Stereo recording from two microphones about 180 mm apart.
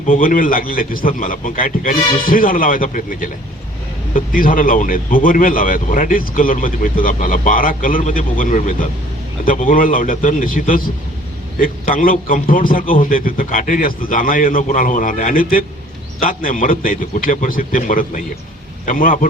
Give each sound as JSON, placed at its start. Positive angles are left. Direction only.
{"t": 0.1, "sound": "speech", "side_deg": 50}